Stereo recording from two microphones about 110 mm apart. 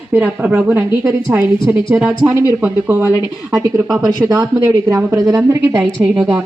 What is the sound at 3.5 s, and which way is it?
Speech, 25° right (ahead or behind).